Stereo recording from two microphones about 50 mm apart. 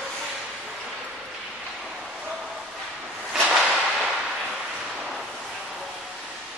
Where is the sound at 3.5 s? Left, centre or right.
Centre.